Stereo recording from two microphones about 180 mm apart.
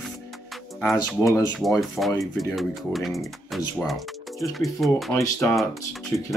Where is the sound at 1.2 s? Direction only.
20° left (ahead or behind).